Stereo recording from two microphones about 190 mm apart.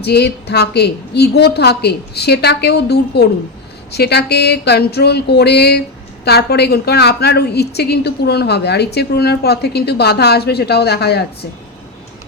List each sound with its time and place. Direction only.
0.0 s a woman's voice: 60° left (ahead or behind)